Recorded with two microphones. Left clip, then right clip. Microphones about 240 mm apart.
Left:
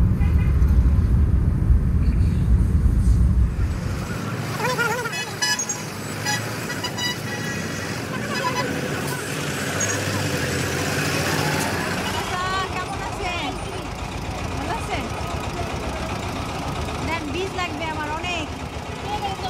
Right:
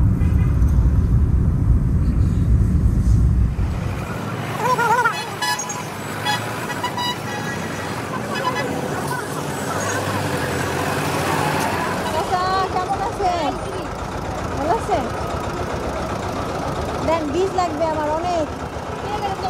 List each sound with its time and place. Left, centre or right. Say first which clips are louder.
4.6 s music: right 7 dB; centre
8.4 s vehicle: right 2 dB; centre
9.8 s vehicle: right 3 dB; centre
14.6 s vehicle: right 9 dB; left
17.9 s vehicle: right 6 dB; left